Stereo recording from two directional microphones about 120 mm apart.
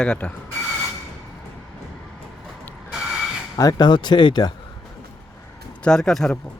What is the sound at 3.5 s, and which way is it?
Speech, 35° left (ahead or behind).